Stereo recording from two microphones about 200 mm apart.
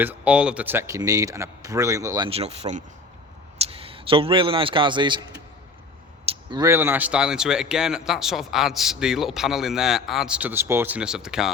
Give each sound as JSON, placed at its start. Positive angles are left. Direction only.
{"t": 0.0, "sound": "a man's voice", "side_deg": -5}
{"t": 6.2, "sound": "speech", "side_deg": -20}